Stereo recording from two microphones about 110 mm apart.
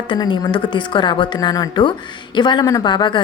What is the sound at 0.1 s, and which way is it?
A woman's voice, 45° left (ahead or behind).